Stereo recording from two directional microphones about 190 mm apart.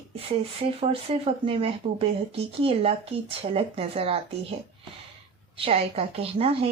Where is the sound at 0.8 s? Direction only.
30° right (ahead or behind).